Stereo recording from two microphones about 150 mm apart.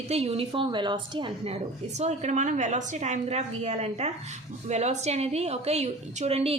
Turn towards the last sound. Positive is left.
turn(degrees=-45)  # may be behind; listen again after turning